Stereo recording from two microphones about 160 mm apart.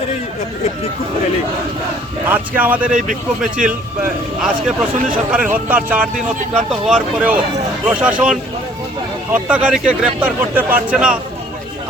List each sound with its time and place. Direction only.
2.2 s speech: 10° right (ahead or behind)